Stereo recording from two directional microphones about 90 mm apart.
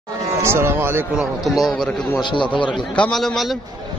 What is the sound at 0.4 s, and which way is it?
Speech, 30° right (ahead or behind).